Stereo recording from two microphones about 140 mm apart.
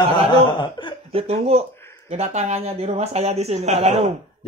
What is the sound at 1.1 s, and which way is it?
Speech, 45° right (ahead or behind).